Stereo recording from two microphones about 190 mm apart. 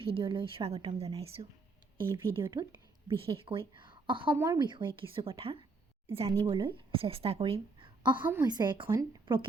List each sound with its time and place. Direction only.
0.0 s speech: 30° right (ahead or behind)
2.4 s a woman's voice: 15° right (ahead or behind)
3.1 s a woman's voice: 30° right (ahead or behind)